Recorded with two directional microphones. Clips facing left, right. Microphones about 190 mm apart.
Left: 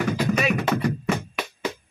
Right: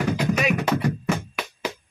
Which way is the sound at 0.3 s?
10° right (ahead or behind).